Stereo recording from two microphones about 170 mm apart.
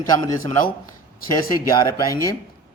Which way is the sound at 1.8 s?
20° left (ahead or behind).